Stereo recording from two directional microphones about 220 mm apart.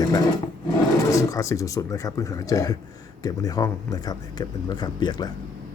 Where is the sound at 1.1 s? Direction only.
15° left (ahead or behind).